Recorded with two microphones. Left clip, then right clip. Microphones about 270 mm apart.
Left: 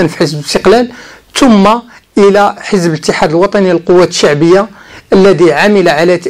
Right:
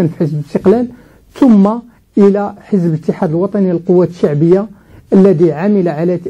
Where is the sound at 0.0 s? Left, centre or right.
Centre.